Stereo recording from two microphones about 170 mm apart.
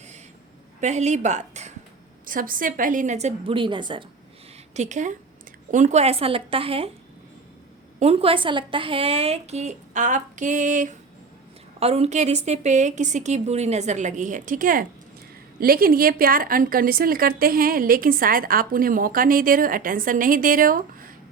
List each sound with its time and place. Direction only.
0.8 s a woman's voice: 40° right (ahead or behind)
2.2 s a woman's voice: 55° right (ahead or behind); by 4.0 s 30° right (ahead or behind)
4.7 s a woman's voice: 45° right (ahead or behind)
7.9 s a woman's voice: 35° right (ahead or behind)
11.8 s a woman's voice: 35° right (ahead or behind); by 21.1 s 55° right (ahead or behind)